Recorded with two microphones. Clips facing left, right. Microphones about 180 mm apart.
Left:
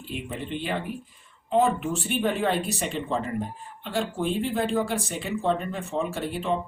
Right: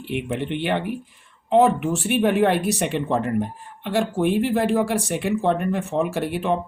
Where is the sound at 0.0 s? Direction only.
70° right (ahead or behind).